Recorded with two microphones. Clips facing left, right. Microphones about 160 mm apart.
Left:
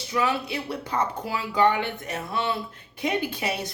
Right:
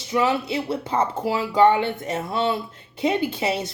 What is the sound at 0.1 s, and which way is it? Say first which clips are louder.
A woman's voice: right 4 dB; 25° right (ahead or behind).